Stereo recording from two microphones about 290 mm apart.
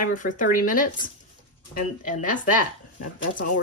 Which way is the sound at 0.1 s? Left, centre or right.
Left.